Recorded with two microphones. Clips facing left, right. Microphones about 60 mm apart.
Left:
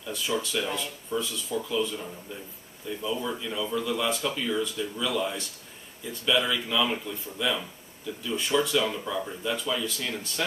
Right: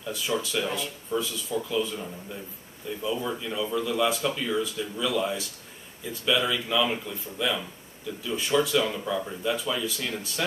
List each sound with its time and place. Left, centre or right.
0.1 s speech: centre